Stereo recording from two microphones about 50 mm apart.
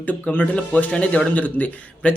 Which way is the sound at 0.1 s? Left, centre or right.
Left.